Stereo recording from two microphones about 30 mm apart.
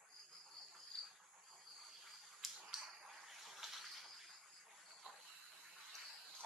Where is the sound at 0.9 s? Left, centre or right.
Centre.